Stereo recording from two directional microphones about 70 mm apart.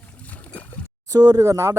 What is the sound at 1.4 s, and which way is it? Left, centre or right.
Speech, right.